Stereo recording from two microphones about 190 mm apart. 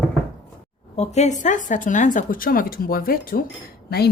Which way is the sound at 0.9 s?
35° left (ahead or behind).